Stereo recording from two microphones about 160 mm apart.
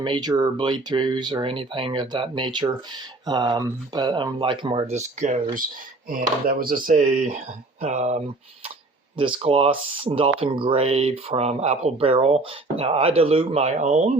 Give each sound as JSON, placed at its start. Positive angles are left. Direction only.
{"t": 0.0, "sound": "speech", "side_deg": -25}
{"t": 6.1, "sound": "speech", "side_deg": -60}
{"t": 9.1, "sound": "speech", "side_deg": -30}